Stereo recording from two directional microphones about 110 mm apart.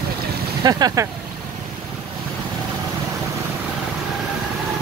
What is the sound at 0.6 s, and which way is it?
Speech, 35° right (ahead or behind).